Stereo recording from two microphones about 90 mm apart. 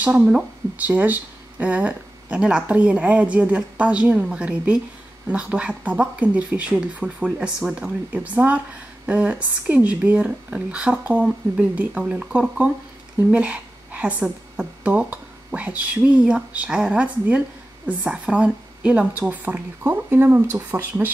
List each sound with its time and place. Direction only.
0.0 s a woman's voice: 10° right (ahead or behind); by 20.8 s 30° right (ahead or behind)